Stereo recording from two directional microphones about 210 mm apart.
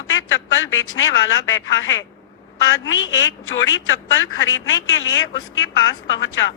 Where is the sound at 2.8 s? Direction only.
65° left (ahead or behind).